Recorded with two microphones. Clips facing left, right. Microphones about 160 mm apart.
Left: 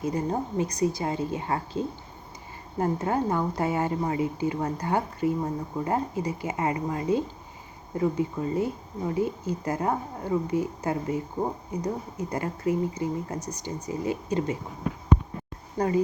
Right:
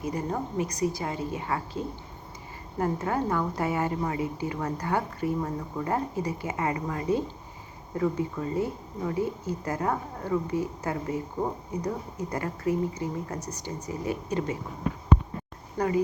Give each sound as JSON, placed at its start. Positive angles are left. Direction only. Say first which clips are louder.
{"t": 0.0, "sound": "a woman's voice", "louder": "left 3 dB", "side_deg": 25}